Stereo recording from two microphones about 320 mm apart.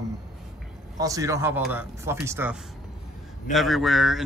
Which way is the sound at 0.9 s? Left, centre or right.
Centre.